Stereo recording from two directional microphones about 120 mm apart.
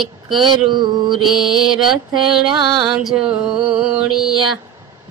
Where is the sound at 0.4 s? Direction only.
40° right (ahead or behind).